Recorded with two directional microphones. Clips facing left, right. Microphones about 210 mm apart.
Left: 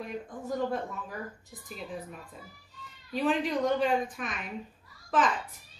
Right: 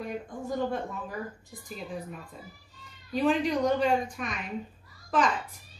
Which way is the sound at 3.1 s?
Centre (ahead or behind).